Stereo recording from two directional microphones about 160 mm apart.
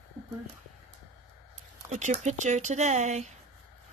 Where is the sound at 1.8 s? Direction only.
45° right (ahead or behind).